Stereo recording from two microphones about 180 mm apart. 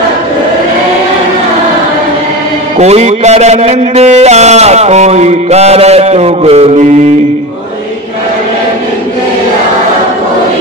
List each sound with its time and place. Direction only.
2.8 s a man's voice: 40° right (ahead or behind)